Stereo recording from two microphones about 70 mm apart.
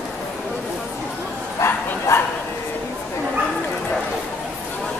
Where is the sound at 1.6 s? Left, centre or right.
Left.